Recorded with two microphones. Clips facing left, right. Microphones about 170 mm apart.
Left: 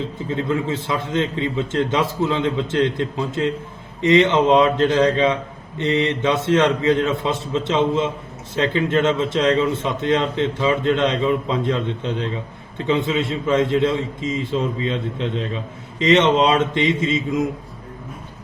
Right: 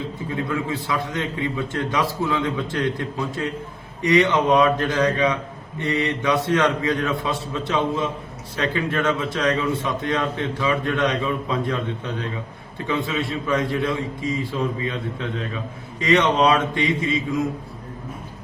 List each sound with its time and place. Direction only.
0.3 s a man's voice: 20° left (ahead or behind)